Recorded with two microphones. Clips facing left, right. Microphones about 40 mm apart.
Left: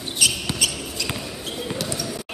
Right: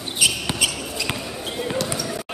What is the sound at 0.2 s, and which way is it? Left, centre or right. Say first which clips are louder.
Basketball bounce: right 1 dB; centre.